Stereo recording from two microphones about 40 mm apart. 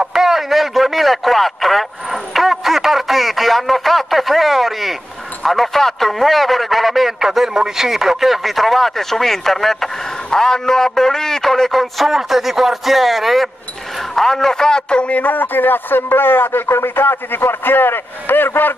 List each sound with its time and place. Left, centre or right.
0.1 s a sound: centre
10.3 s a man's voice: centre
11.7 s a man's voice: centre; by 15.0 s left
15.0 s speech: left